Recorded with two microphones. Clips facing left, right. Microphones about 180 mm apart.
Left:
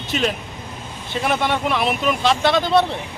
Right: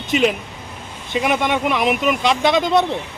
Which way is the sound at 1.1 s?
15° right (ahead or behind).